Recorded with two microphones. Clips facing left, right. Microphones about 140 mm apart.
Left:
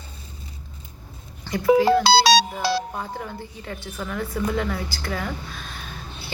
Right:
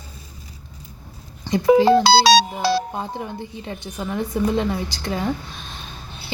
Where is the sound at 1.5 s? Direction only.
15° right (ahead or behind).